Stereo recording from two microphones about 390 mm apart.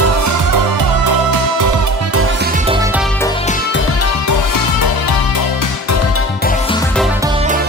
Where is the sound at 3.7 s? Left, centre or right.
Left.